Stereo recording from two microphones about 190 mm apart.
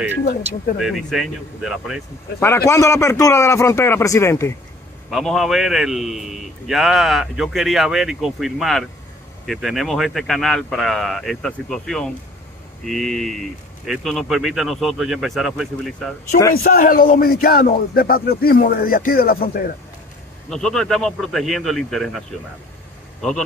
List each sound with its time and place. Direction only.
0.2 s speech: 55° left (ahead or behind)
0.7 s a man's voice: centre (ahead or behind)
2.4 s a man's voice: 15° left (ahead or behind)
5.1 s a man's voice: centre (ahead or behind)
16.5 s speech: 50° left (ahead or behind)
20.4 s a man's voice: 5° left (ahead or behind)